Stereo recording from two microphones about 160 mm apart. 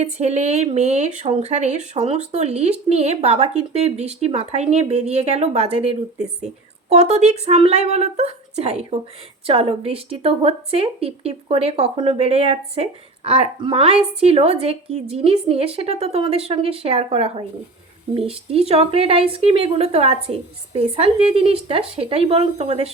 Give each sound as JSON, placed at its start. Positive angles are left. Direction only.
{"t": 0.0, "sound": "a woman's voice", "side_deg": -45}